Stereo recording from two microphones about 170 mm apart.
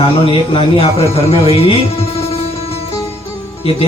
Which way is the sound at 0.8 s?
35° left (ahead or behind).